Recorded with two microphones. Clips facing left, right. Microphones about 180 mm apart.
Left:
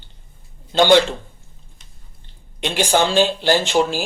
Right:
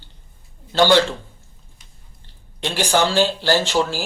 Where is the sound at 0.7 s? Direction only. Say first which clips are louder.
Left 2 dB; 20° left (ahead or behind).